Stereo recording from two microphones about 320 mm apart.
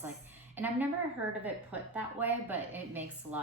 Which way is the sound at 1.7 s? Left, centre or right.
Centre.